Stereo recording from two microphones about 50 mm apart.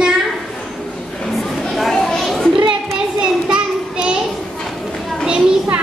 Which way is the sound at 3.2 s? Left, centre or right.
Centre.